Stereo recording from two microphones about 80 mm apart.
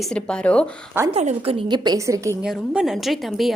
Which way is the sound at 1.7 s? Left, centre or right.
Right.